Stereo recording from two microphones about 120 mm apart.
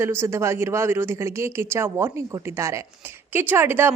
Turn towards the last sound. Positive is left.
turn(degrees=-20)  # may be behind; listen again after turning